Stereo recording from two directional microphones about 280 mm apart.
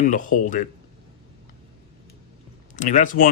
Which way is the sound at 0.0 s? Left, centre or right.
Left.